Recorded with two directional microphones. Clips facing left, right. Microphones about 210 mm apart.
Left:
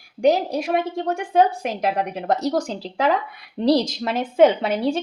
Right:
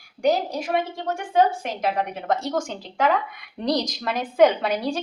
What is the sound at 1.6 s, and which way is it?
A woman's voice, 35° left (ahead or behind).